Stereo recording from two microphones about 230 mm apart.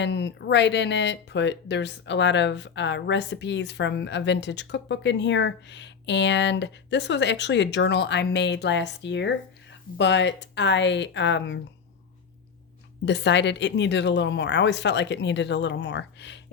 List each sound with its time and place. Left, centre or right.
0.0 s speech: left
13.1 s speech: left